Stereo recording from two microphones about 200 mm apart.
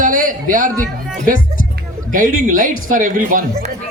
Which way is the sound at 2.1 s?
40° right (ahead or behind).